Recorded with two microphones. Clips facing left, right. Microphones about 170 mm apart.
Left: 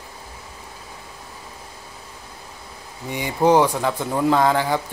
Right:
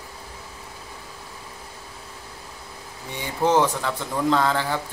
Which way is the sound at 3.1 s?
10° left (ahead or behind).